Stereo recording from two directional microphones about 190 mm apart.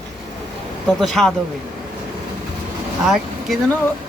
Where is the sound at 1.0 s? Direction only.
Centre (ahead or behind).